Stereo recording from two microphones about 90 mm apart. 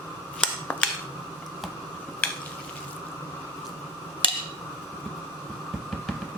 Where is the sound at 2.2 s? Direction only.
15° left (ahead or behind).